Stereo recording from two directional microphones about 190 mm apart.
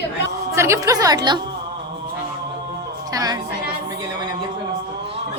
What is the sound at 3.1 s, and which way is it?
Speech, 20° right (ahead or behind).